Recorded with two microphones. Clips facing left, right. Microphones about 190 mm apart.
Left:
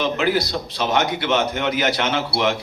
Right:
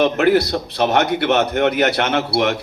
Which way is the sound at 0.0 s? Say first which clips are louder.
Right 6 dB; 60° right (ahead or behind).